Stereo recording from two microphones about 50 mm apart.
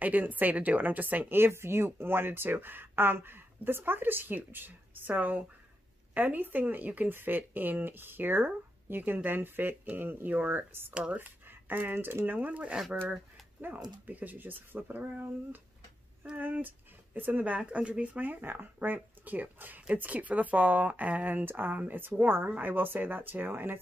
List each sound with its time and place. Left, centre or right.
0.0 s speech: right
1.3 s speech: right
10.9 s speech: right
11.1 s speech: right
12.4 s speech: right
14.0 s speech: right